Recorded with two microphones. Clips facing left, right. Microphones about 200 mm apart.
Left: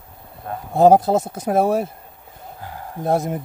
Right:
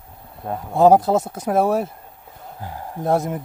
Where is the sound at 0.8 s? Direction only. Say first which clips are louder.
Left 1 dB; 35° left (ahead or behind).